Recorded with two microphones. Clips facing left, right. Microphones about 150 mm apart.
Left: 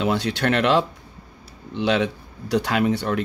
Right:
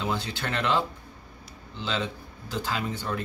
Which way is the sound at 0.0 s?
75° left (ahead or behind).